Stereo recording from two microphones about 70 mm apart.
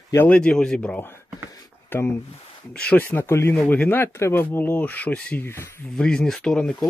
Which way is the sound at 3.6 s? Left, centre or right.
Left.